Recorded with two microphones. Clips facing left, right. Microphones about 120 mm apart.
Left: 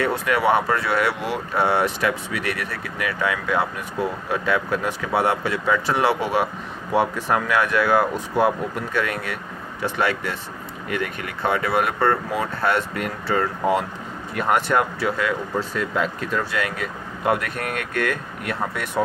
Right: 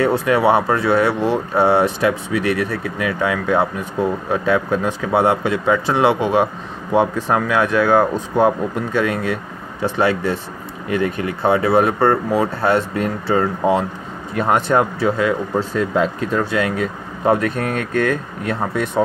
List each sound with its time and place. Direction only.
0.0 s speech: 30° right (ahead or behind)